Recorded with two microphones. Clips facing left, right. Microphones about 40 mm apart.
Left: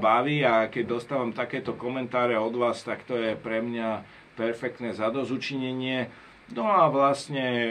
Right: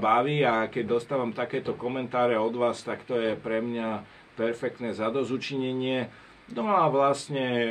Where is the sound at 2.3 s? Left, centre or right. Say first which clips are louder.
Even; centre.